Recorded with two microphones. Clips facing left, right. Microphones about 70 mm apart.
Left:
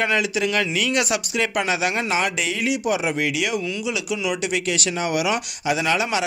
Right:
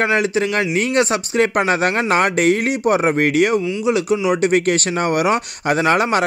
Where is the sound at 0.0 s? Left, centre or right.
Right.